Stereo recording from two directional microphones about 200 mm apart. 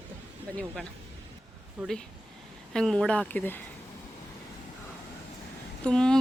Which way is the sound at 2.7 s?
5° left (ahead or behind).